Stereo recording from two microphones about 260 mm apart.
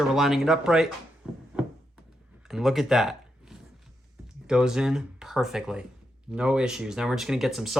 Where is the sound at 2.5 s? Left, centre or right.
Centre.